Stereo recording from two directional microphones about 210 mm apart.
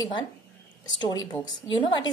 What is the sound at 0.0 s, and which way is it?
A woman's voice, 20° left (ahead or behind).